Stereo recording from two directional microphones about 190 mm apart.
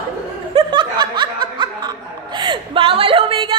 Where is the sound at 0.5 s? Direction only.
25° right (ahead or behind).